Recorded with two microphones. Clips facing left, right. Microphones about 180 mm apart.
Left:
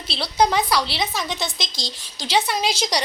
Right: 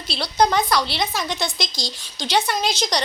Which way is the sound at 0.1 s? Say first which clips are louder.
Right 1 dB; 5° left (ahead or behind).